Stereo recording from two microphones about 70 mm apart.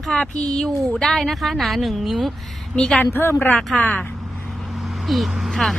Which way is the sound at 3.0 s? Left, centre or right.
Left.